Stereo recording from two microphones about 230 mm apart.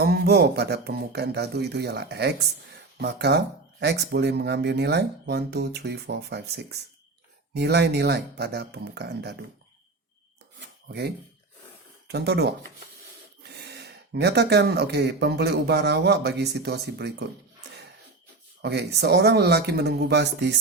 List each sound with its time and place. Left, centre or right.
0.0 s speech: right
12.0 s speech: right
18.6 s speech: right